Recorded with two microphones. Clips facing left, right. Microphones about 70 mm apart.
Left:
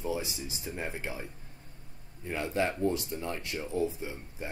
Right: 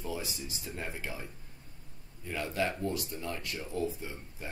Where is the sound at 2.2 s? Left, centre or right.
Left.